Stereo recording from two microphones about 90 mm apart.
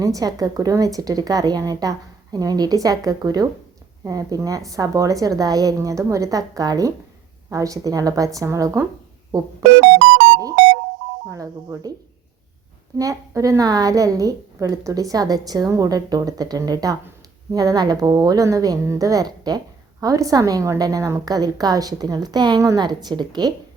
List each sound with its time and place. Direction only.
0.0 s a woman's voice: 40° right (ahead or behind)
11.3 s a woman's voice: 35° right (ahead or behind)
13.0 s a woman's voice: 40° right (ahead or behind)